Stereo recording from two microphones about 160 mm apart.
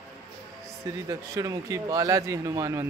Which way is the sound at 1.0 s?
20° right (ahead or behind).